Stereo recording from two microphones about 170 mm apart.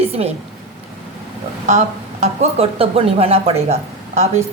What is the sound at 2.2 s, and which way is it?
Speech, 40° right (ahead or behind).